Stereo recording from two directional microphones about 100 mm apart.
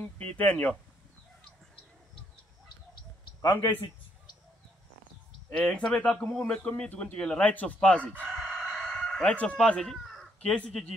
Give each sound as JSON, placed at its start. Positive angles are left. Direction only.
{"t": 0.4, "sound": "speech", "side_deg": 15}
{"t": 5.5, "sound": "speech", "side_deg": 10}
{"t": 8.3, "sound": "chicken", "side_deg": -5}